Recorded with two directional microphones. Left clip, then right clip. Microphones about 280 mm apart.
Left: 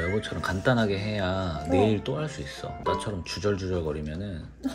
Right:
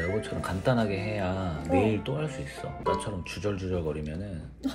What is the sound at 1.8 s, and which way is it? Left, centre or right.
Speech, left.